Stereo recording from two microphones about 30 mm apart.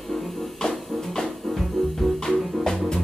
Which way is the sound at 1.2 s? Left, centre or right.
Centre.